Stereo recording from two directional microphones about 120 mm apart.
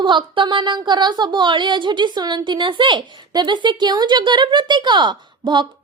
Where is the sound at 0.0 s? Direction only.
40° right (ahead or behind).